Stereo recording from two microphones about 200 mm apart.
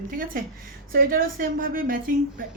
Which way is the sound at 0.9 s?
45° right (ahead or behind).